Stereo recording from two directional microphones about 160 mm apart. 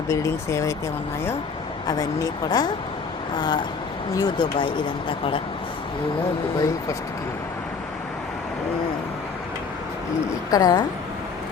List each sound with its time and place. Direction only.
0.1 s speech: 20° left (ahead or behind)
1.9 s speech: 25° left (ahead or behind)
10.5 s speech: 25° left (ahead or behind)